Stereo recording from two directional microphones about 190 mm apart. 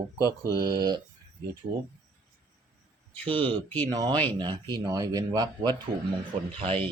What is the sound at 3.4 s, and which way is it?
Speech, 10° left (ahead or behind).